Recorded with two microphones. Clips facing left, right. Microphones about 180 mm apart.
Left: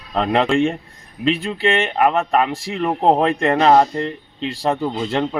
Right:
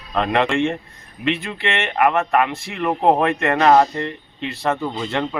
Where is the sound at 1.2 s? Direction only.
35° left (ahead or behind).